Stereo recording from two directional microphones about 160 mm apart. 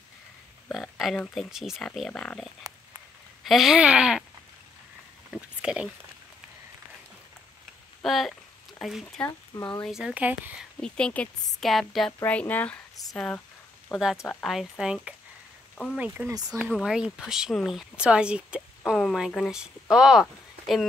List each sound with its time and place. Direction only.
0.7 s speech: centre (ahead or behind)
5.3 s speech: 5° right (ahead or behind)
8.0 s a sound: centre (ahead or behind)
9.6 s speech: 25° left (ahead or behind)
9.8 s speech: 5° right (ahead or behind)
10.8 s speech: 5° left (ahead or behind)
14.5 s speech: centre (ahead or behind)